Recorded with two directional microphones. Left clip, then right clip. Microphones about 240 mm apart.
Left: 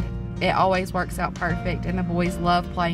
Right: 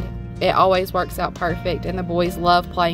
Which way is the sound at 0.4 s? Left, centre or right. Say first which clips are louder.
Right 5 dB; centre.